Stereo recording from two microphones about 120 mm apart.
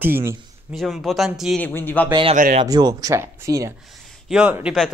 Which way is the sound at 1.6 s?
15° left (ahead or behind).